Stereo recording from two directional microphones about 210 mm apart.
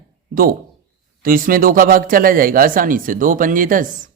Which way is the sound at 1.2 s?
40° right (ahead or behind).